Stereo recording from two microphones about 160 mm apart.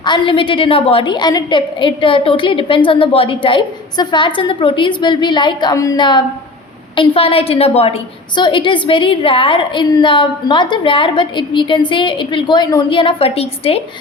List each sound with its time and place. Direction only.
0.0 s a woman's voice: 30° left (ahead or behind)